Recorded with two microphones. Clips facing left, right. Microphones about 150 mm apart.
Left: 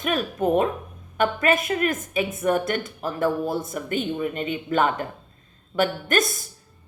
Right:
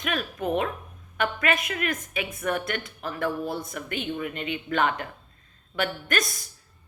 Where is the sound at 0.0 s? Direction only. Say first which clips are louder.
Left 6 dB; 40° left (ahead or behind).